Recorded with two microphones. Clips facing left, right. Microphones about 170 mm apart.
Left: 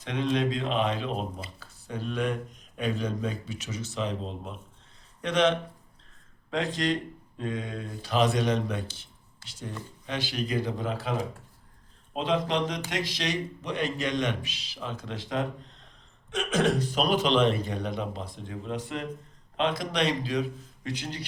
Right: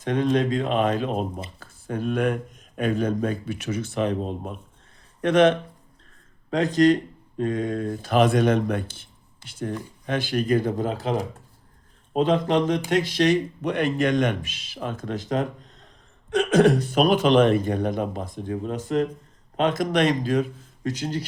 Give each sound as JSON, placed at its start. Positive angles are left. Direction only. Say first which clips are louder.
{"t": 0.0, "sound": "speech", "louder": "right 5 dB", "side_deg": -50}
{"t": 6.5, "sound": "speech", "louder": "right 10 dB", "side_deg": -40}
{"t": 12.1, "sound": "speech", "louder": "right 7 dB", "side_deg": -50}
{"t": 16.3, "sound": "speech", "louder": "right 8 dB", "side_deg": -60}